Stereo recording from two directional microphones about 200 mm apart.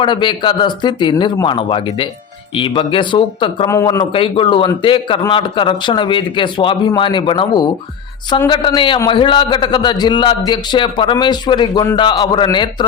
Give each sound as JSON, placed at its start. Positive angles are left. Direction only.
{"t": 0.0, "sound": "a man's voice", "side_deg": 25}
{"t": 3.7, "sound": "a man's voice", "side_deg": 15}